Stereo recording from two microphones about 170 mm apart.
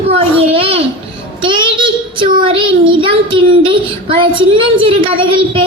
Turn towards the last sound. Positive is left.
turn(degrees=-30)  # may be behind; listen again after turning